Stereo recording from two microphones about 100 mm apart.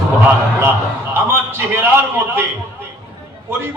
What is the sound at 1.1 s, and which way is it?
A man's voice, 20° right (ahead or behind).